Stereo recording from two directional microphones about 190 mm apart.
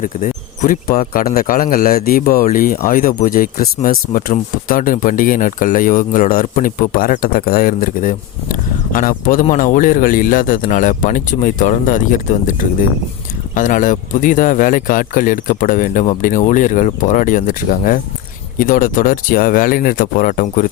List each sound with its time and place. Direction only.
0.0 s speech: 45° left (ahead or behind)